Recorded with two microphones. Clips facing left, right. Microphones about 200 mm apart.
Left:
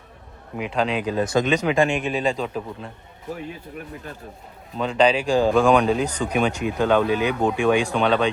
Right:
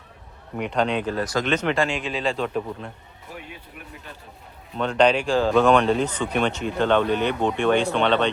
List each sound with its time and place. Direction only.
0.5 s speech: 5° left (ahead or behind)
1.2 s speech: 25° left (ahead or behind)
1.5 s speech: 10° left (ahead or behind)
2.4 s speech: centre (ahead or behind)
4.8 s speech: 5° left (ahead or behind)